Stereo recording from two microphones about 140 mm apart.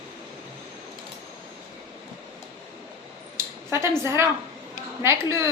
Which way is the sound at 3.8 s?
20° right (ahead or behind).